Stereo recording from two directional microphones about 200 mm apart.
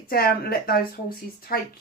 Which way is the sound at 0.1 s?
50° left (ahead or behind).